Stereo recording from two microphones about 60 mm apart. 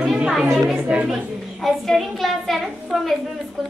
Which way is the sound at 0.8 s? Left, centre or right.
Centre.